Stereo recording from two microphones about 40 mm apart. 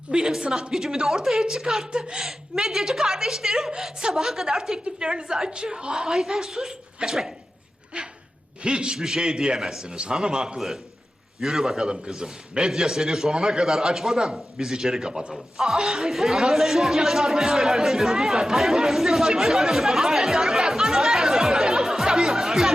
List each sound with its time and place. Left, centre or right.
0.1 s a woman's voice: centre
2.2 s a woman's voice: centre
5.0 s a man's voice: right
7.9 s a man's voice: right
9.0 s a woman's voice: centre
9.8 s a man's voice: right
11.3 s a woman's voice: centre
11.9 s a woman's voice: centre